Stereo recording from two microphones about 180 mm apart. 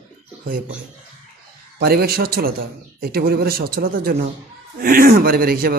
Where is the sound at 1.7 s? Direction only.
60° right (ahead or behind).